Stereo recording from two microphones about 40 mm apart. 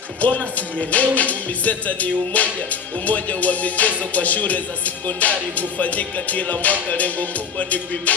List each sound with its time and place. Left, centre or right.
0.2 s music: left